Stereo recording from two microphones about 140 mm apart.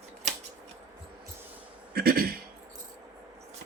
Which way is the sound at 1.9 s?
90° right.